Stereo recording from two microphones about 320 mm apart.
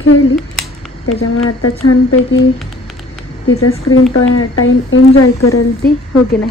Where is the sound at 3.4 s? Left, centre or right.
Left.